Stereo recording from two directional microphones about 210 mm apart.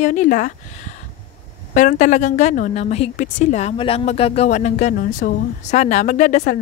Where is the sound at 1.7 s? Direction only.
35° left (ahead or behind).